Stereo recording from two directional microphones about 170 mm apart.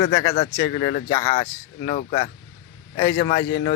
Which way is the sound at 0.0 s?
30° left (ahead or behind).